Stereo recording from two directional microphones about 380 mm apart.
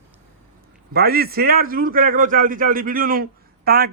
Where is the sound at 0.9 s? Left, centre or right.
Right.